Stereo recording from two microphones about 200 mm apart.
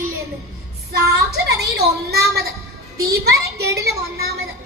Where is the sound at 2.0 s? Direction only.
55° right (ahead or behind).